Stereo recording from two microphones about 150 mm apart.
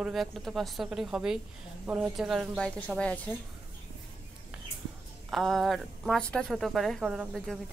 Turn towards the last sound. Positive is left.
turn(degrees=0)  # may be behind; listen again after turning